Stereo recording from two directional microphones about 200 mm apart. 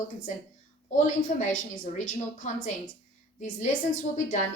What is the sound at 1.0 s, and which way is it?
Speech, 40° left (ahead or behind).